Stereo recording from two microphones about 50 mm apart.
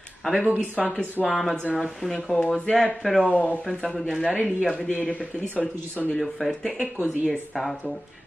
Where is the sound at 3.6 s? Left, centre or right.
Centre.